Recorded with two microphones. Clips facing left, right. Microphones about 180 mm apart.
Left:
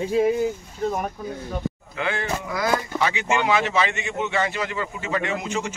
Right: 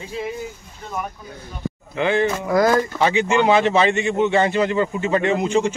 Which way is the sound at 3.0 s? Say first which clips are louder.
Right 5 dB; 30° right (ahead or behind).